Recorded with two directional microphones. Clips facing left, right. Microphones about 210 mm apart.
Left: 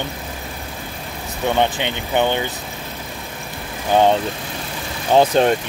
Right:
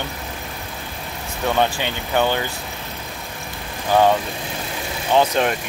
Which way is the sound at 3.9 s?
20° left (ahead or behind).